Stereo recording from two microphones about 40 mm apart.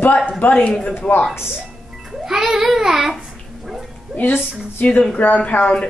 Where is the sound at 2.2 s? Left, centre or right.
Centre.